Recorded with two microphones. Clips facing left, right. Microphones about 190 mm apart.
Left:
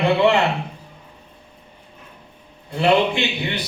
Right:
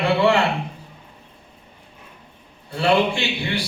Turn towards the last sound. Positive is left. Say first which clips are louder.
# left 1 dB
turn(degrees=20)  # may be behind; listen again after turning